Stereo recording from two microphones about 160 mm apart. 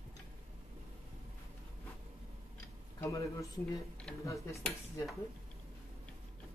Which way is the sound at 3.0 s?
20° left (ahead or behind).